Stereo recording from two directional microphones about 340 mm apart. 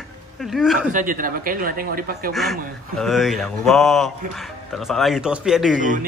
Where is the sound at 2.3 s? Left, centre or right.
Centre.